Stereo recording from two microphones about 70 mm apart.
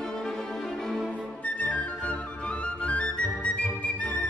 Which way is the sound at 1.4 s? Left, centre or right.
Left.